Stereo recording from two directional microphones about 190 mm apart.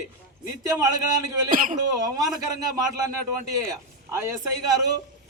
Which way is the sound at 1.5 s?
45° right (ahead or behind).